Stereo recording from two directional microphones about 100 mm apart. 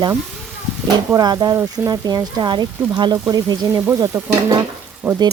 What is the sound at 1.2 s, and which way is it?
Speech, 40° right (ahead or behind).